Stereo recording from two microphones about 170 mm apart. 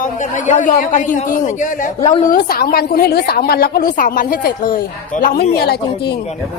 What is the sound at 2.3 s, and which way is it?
A woman's voice, 60° left (ahead or behind).